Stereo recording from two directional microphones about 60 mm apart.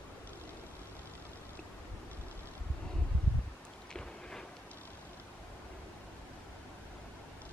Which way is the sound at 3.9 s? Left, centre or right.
Centre.